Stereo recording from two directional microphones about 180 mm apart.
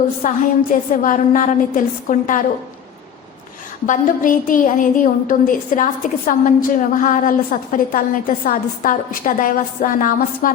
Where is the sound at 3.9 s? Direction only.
50° left (ahead or behind).